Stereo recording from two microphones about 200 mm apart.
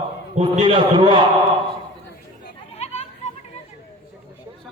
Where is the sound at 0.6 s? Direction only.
20° right (ahead or behind).